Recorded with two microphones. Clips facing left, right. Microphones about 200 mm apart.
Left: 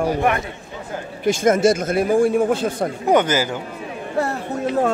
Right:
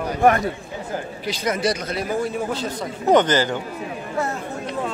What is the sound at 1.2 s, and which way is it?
Speech, 50° left (ahead or behind).